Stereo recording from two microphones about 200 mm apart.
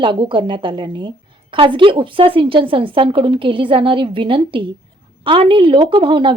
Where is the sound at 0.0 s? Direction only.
25° right (ahead or behind).